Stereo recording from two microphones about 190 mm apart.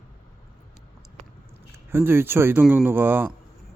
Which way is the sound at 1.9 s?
10° right (ahead or behind).